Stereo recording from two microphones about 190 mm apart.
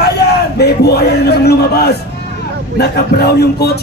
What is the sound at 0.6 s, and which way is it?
A man's voice, 55° left (ahead or behind).